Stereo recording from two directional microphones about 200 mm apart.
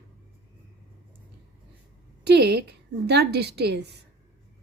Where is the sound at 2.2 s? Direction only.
55° right (ahead or behind).